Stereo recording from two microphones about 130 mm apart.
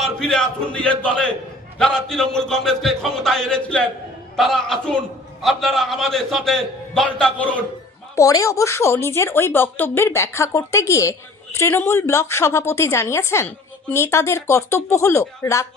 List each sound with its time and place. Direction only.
0.0 s a man's voice: 5° left (ahead or behind)
8.2 s a woman's voice: 25° left (ahead or behind)